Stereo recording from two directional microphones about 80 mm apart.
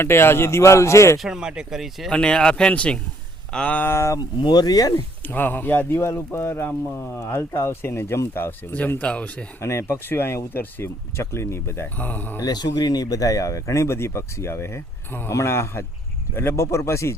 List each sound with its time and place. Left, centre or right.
0.0 s speech: left
1.2 s speech: centre
2.0 s speech: centre; by 4.2 s left
4.2 s speech: left
4.9 s speech: left
9.6 s speech: left
11.9 s speech: left
12.4 s speech: left